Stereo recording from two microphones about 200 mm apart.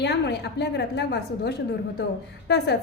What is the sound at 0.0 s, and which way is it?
A woman's voice, 55° left (ahead or behind).